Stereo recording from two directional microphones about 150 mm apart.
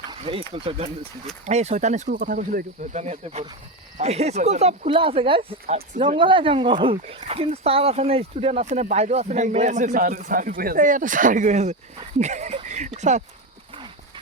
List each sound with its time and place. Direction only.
0.1 s speech: 35° right (ahead or behind); by 2.6 s 75° right (ahead or behind)
2.9 s speech: 45° right (ahead or behind)
4.9 s speech: 35° right (ahead or behind)
12.6 s a sound: 50° right (ahead or behind)